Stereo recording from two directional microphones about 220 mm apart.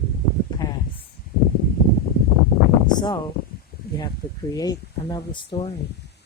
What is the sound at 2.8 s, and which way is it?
Speech, 20° left (ahead or behind).